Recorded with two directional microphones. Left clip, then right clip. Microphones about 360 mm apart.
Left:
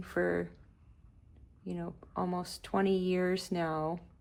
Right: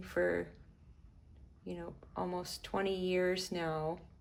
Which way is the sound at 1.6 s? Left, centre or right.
Centre.